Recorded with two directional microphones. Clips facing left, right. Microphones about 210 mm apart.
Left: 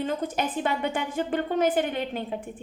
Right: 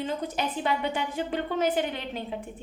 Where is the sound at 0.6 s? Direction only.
50° left (ahead or behind).